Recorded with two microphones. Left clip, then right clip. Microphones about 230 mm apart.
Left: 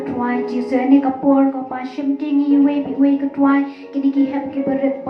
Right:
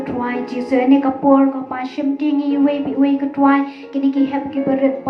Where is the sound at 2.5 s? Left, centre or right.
Right.